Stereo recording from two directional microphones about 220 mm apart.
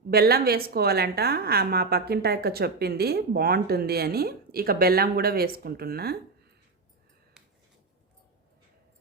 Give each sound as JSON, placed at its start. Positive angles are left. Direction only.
{"t": 0.1, "sound": "a woman's voice", "side_deg": -45}